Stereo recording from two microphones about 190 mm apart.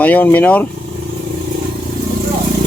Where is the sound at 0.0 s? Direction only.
10° left (ahead or behind).